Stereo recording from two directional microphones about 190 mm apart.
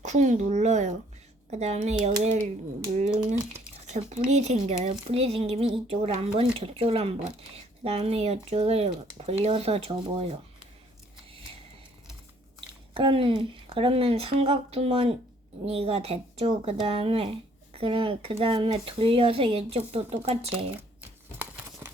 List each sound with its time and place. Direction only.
0.0 s speech: 40° right (ahead or behind)
4.1 s speech: 35° right (ahead or behind)
12.5 s speech: 25° right (ahead or behind)